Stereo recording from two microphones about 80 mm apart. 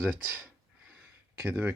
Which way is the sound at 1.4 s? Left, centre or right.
Right.